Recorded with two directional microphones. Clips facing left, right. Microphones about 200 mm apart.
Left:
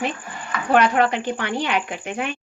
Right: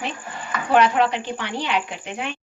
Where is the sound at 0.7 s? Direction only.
50° left (ahead or behind).